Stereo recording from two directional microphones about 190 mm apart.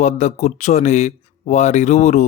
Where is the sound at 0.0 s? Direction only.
35° left (ahead or behind).